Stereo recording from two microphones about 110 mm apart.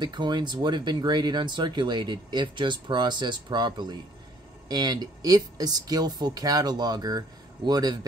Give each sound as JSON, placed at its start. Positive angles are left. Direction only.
{"t": 0.0, "sound": "speech", "side_deg": -40}